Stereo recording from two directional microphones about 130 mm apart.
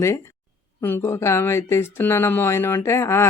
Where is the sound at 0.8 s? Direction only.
15° left (ahead or behind).